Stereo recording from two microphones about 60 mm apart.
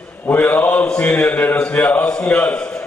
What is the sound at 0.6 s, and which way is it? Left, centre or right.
A man's voice, centre.